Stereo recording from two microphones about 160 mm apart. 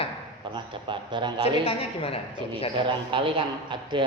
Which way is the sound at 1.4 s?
40° left (ahead or behind).